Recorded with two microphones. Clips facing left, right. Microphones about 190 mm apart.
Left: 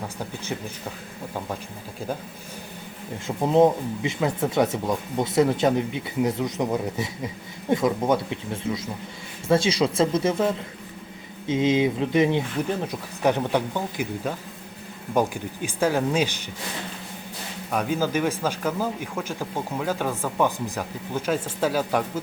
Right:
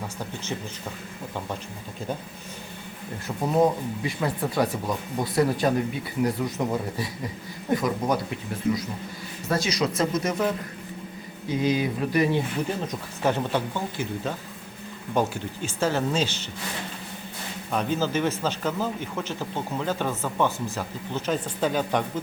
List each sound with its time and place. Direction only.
3.2 s speech: 25° left (ahead or behind)
17.7 s speech: 10° left (ahead or behind)